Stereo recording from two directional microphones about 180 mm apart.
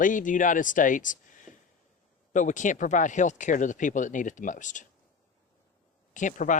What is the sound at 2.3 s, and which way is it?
Speech, 45° left (ahead or behind).